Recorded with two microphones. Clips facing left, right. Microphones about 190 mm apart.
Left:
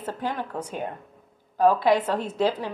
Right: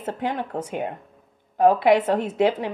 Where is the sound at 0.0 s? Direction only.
25° right (ahead or behind).